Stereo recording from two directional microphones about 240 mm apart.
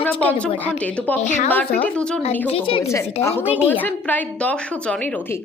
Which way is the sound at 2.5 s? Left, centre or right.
Left.